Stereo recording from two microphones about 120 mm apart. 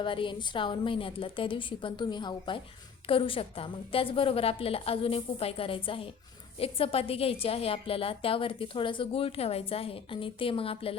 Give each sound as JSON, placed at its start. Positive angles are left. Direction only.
{"t": 0.0, "sound": "a woman's voice", "side_deg": 45}